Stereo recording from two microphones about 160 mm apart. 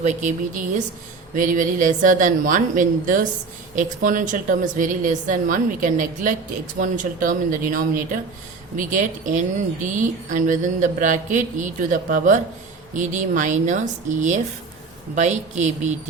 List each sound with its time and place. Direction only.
0.0 s mantra: 50° right (ahead or behind)
1.4 s a woman's voice: 55° right (ahead or behind)
8.7 s mantra: 55° right (ahead or behind)